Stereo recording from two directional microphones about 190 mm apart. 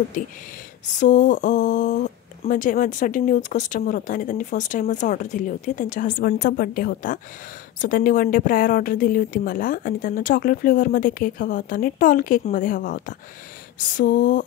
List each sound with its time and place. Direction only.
0.9 s speech: 40° left (ahead or behind)